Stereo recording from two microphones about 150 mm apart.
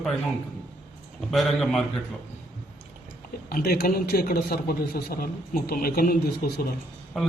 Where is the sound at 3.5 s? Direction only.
85° left.